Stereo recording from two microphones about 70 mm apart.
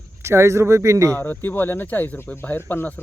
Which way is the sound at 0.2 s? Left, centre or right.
Right.